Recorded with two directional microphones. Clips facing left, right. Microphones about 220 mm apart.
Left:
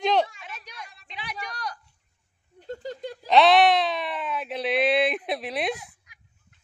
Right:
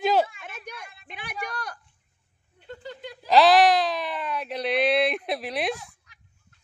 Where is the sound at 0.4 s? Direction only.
50° right (ahead or behind).